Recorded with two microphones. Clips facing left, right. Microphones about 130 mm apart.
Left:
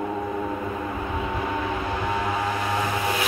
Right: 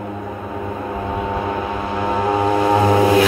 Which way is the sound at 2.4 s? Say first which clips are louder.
Right 11 dB; 60° right (ahead or behind).